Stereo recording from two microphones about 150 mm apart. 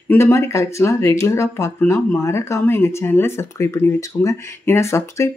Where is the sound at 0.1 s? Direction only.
20° left (ahead or behind).